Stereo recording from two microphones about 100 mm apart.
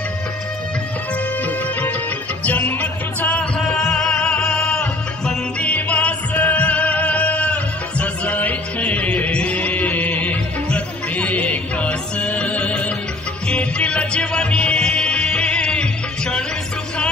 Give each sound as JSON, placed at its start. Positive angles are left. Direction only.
{"t": 1.4, "sound": "music", "side_deg": 15}